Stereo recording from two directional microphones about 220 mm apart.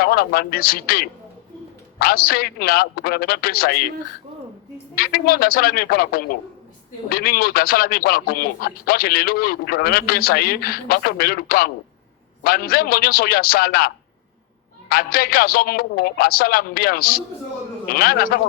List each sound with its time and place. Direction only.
0.0 s speech: 45° left (ahead or behind)
4.9 s speech: 40° left (ahead or behind)